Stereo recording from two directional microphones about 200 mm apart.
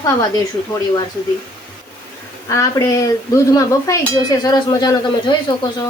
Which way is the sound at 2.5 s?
15° left (ahead or behind).